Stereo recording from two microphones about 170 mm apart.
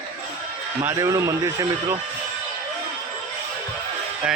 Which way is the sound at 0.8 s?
20° right (ahead or behind).